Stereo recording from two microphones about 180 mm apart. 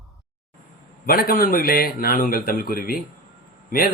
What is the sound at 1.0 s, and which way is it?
A man's voice, 55° left (ahead or behind).